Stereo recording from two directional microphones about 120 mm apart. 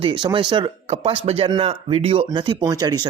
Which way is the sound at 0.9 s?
55° right (ahead or behind).